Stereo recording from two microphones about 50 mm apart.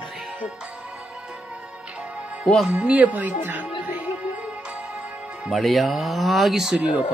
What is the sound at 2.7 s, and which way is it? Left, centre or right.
Music, right.